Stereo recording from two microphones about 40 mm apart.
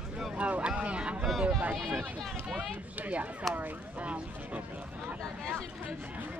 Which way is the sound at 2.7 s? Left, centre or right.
Right.